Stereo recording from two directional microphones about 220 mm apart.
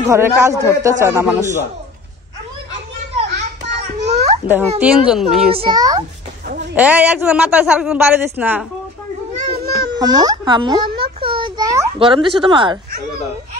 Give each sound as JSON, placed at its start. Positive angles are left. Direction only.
{"t": 0.0, "sound": "speech", "side_deg": -10}
{"t": 3.6, "sound": "a sound", "side_deg": -30}
{"t": 4.5, "sound": "a man's voice", "side_deg": -10}
{"t": 5.5, "sound": "speech", "side_deg": -20}
{"t": 6.4, "sound": "a sound", "side_deg": -40}
{"t": 6.7, "sound": "a man's voice", "side_deg": -5}
{"t": 9.9, "sound": "speech", "side_deg": -20}
{"t": 11.0, "sound": "a sound", "side_deg": -25}
{"t": 12.0, "sound": "speech", "side_deg": -25}